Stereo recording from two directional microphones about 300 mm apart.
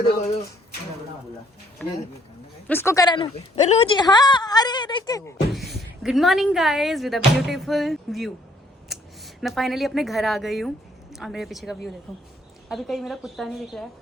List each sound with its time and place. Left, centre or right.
1.8 s a woman's voice: centre
5.5 s speech: centre
8.9 s a sound: centre
9.4 s a woman's voice: centre